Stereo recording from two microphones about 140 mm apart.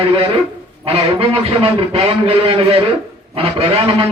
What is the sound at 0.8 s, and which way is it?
A man's voice, 45° right (ahead or behind).